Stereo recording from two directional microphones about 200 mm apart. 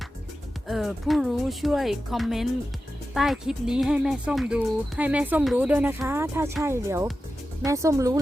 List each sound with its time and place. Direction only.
0.7 s speech: centre (ahead or behind)